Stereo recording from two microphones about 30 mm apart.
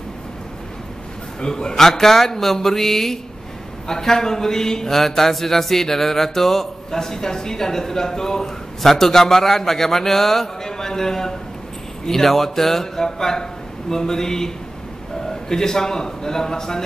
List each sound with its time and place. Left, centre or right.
1.8 s a man's voice: centre